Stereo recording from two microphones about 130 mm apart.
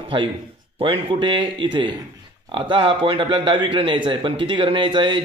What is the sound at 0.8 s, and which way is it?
Speech, 45° right (ahead or behind).